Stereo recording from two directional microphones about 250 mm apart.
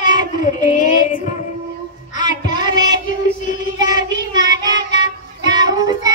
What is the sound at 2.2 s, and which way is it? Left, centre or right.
Child singing, centre.